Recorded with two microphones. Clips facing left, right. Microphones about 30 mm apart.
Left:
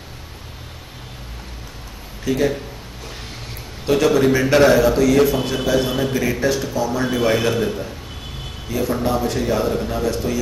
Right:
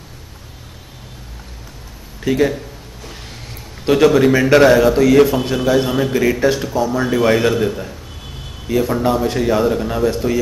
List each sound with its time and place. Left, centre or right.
2.3 s a man's voice: centre
3.8 s a man's voice: centre